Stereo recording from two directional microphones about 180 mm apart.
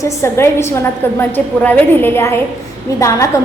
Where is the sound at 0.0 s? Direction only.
15° left (ahead or behind).